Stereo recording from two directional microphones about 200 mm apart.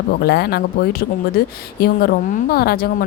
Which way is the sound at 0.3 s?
50° left (ahead or behind).